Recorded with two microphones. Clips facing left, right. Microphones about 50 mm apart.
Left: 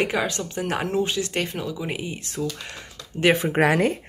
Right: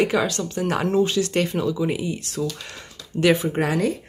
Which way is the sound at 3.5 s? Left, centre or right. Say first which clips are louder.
Left 3 dB; left.